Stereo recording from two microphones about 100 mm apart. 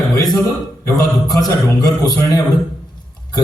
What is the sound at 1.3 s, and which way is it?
A man's voice, 35° left (ahead or behind).